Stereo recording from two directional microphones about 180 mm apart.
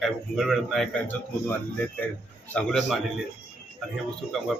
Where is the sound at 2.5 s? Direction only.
5° left (ahead or behind).